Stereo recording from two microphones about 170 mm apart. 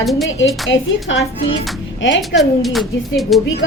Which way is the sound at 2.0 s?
90° left.